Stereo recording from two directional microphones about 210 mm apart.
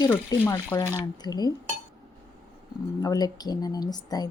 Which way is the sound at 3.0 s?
20° left (ahead or behind).